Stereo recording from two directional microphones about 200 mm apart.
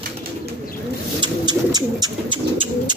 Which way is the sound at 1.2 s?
20° right (ahead or behind).